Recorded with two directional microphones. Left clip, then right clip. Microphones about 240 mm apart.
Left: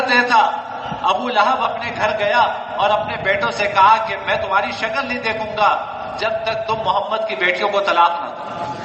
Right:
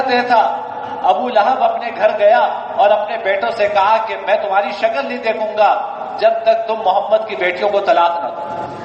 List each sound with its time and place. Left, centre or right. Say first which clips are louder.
0.1 s a man's voice: even; left